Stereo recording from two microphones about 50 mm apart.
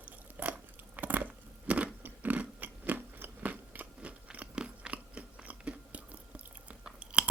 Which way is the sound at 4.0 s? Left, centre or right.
Right.